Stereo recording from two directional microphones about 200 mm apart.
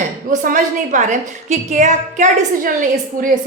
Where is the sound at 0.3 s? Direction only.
40° right (ahead or behind).